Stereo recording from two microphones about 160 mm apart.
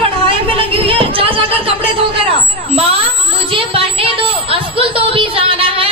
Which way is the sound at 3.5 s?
35° right (ahead or behind).